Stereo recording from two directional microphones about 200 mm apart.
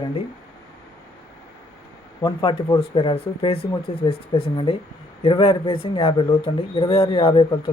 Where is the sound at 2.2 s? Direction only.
20° left (ahead or behind).